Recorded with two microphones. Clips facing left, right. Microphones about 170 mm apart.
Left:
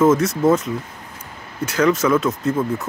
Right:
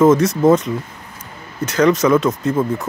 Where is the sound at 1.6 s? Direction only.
5° left (ahead or behind).